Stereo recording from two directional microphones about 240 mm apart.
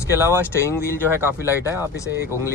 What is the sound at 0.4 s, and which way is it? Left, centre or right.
Speech, centre.